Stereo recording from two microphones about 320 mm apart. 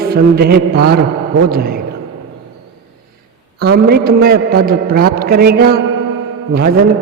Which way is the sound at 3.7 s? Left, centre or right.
Right.